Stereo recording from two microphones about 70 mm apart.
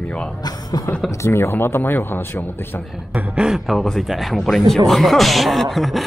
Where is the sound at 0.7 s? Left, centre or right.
Left.